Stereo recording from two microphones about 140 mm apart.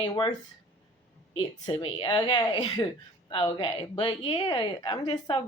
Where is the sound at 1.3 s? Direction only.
35° left (ahead or behind).